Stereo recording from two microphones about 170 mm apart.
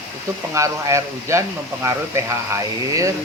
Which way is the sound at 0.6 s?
15° right (ahead or behind).